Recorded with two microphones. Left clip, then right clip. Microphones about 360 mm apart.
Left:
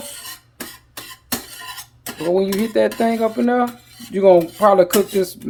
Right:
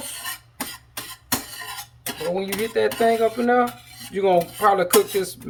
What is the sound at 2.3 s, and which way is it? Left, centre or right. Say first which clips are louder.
Speech: left 7 dB; centre.